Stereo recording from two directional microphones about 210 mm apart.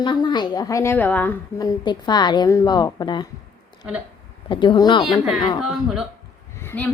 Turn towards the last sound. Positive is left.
turn(degrees=5)  # may be behind; listen again after turning